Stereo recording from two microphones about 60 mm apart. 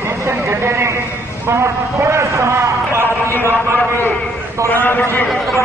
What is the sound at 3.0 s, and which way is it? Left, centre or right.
Speech, left.